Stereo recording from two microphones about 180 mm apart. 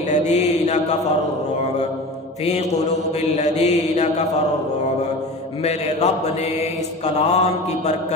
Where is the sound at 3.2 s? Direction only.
40° left (ahead or behind).